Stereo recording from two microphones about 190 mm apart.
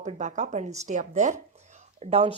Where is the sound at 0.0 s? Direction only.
35° right (ahead or behind).